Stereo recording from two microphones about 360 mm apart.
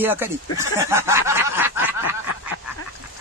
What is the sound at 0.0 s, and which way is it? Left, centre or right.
A man's voice, centre.